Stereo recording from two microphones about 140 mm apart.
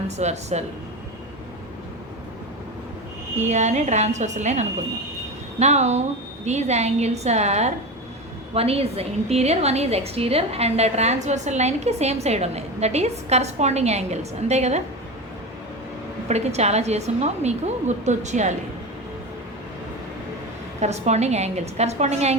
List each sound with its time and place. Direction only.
0.2 s a woman's voice: 55° right (ahead or behind)
3.3 s a woman's voice: 55° right (ahead or behind)
16.3 s a woman's voice: 50° right (ahead or behind)
20.8 s a woman's voice: 55° right (ahead or behind)